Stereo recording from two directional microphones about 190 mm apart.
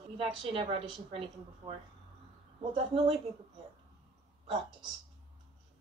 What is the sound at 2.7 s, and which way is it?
Speech, 30° right (ahead or behind).